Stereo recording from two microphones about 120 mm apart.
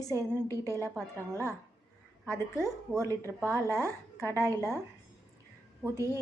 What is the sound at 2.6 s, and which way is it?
A woman's voice, 25° right (ahead or behind).